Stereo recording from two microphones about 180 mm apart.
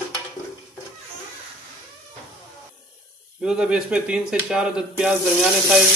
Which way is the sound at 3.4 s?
5° right (ahead or behind).